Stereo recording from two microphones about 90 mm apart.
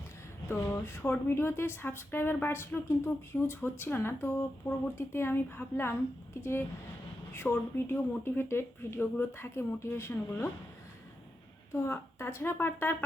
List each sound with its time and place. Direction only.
0.4 s a woman's voice: 30° left (ahead or behind)
11.7 s a woman's voice: 30° left (ahead or behind)